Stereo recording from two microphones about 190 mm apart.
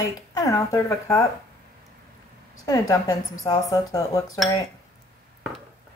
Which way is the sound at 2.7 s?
20° left (ahead or behind).